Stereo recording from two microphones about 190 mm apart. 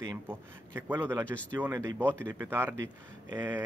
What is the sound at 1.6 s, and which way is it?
Speech, 15° right (ahead or behind).